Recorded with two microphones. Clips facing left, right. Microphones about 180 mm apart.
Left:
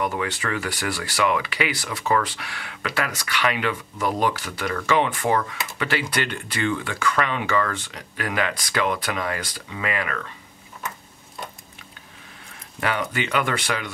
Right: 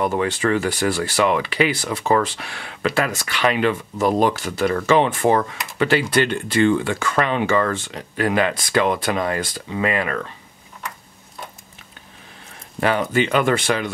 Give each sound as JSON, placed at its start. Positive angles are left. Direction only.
{"t": 0.0, "sound": "speech", "side_deg": -30}
{"t": 12.8, "sound": "speech", "side_deg": -30}